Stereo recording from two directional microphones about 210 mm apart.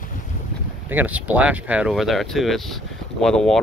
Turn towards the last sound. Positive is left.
turn(degrees=0)  # may be behind; listen again after turning